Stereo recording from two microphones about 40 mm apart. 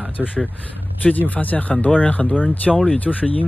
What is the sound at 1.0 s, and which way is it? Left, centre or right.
Speech, left.